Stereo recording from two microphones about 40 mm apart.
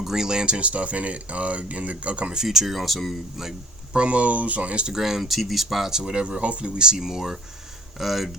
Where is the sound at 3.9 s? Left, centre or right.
Right.